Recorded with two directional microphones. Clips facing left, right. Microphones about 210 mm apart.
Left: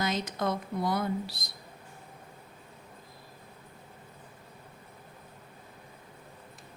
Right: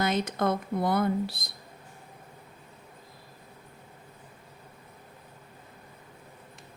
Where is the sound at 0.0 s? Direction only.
55° right (ahead or behind).